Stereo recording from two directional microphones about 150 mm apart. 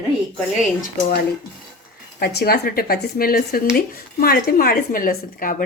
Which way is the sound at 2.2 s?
90° left.